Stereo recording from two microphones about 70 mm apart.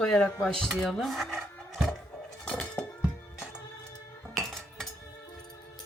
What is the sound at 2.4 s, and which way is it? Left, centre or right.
Chink, centre.